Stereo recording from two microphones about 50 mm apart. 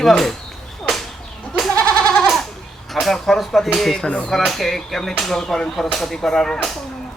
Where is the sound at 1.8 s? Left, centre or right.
Left.